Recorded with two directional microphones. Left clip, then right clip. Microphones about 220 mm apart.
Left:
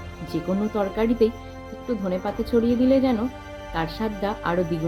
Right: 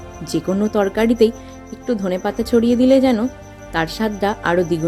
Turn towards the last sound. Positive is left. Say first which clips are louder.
# right 7 dB
turn(degrees=-35)  # may be behind; listen again after turning